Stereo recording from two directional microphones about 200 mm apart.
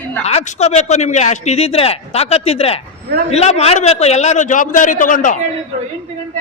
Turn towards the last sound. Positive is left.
turn(degrees=40)  # may be behind; listen again after turning